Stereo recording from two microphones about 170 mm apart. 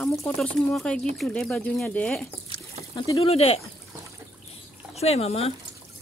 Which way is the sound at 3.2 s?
35° left (ahead or behind).